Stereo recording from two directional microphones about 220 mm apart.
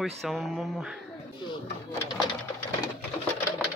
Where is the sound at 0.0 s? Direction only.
Centre (ahead or behind).